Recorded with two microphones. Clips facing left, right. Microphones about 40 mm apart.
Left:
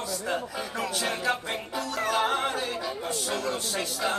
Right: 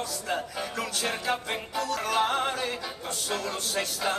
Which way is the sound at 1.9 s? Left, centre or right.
Centre.